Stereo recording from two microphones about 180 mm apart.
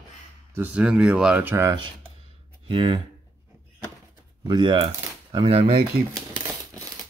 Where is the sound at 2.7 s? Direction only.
25° right (ahead or behind).